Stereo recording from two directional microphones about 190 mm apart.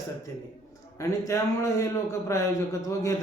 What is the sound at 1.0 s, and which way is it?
Speech, 15° left (ahead or behind).